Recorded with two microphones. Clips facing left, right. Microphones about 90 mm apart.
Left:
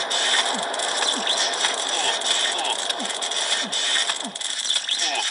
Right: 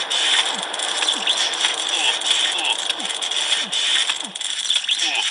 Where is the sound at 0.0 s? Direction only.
10° left (ahead or behind).